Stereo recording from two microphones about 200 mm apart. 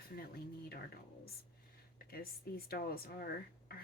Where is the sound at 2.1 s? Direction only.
50° left (ahead or behind).